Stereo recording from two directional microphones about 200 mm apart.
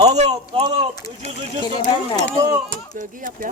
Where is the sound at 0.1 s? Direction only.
30° right (ahead or behind).